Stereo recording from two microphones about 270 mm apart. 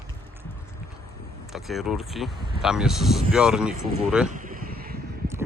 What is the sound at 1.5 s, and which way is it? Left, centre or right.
Speech, centre.